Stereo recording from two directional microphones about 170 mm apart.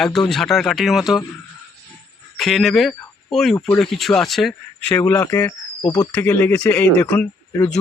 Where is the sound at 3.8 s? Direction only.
Centre (ahead or behind).